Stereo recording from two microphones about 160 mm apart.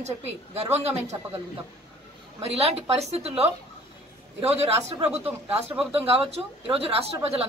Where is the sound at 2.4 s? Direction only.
40° right (ahead or behind).